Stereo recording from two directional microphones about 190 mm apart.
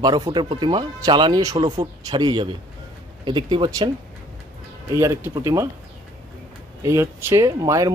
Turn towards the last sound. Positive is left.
turn(degrees=-20)  # may be behind; listen again after turning